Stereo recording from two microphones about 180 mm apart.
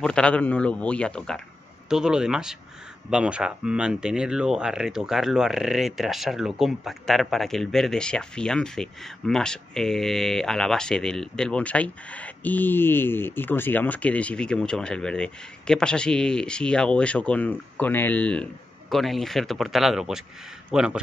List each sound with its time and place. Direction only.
0.0 s speech: 5° left (ahead or behind)